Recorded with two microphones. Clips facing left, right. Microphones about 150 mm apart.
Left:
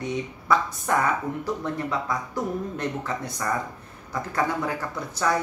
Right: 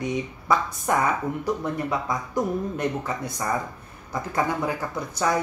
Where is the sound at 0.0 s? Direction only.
15° right (ahead or behind).